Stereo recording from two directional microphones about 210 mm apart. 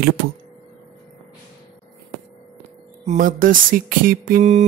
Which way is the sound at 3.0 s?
40° right (ahead or behind).